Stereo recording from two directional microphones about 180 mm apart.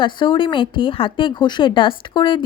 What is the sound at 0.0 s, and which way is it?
Speech, 25° left (ahead or behind).